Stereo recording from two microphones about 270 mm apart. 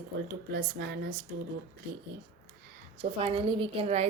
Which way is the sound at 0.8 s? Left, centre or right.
Right.